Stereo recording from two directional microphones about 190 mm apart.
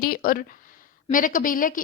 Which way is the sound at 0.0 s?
50° left (ahead or behind).